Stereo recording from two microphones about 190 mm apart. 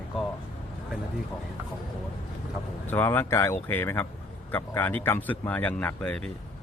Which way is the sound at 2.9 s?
10° left (ahead or behind).